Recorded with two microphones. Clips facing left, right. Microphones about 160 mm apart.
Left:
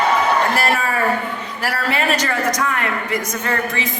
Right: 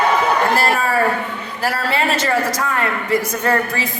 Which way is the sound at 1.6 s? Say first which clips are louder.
Right 2 dB; 30° right (ahead or behind).